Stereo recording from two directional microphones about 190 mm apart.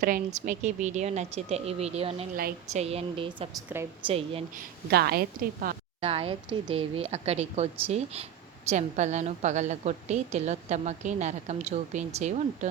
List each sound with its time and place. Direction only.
0.0 s speech: 45° right (ahead or behind); by 3.5 s 25° right (ahead or behind)
3.7 s a woman's voice: 10° right (ahead or behind)
4.0 s a woman's voice: 30° right (ahead or behind)
4.5 s a woman's voice: 55° right (ahead or behind)
6.0 s speech: 30° right (ahead or behind)